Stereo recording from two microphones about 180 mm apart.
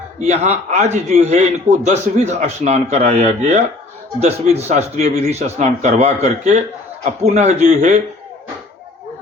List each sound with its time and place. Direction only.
0.3 s a man's voice: 40° right (ahead or behind)